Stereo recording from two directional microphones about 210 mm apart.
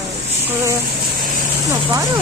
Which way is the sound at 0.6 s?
15° right (ahead or behind).